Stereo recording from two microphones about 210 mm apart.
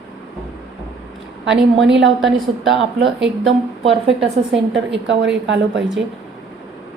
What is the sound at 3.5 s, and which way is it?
A woman's voice, 65° right (ahead or behind).